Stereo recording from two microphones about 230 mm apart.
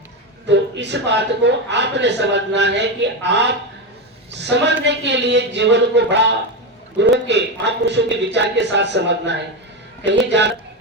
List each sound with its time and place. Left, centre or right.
0.4 s a man's voice: right